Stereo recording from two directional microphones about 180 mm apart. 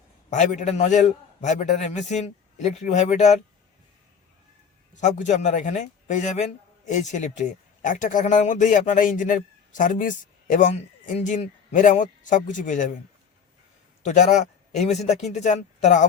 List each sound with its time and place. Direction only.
0.3 s a man's voice: 40° left (ahead or behind)
4.9 s a man's voice: 40° left (ahead or behind)
14.0 s a man's voice: 45° left (ahead or behind)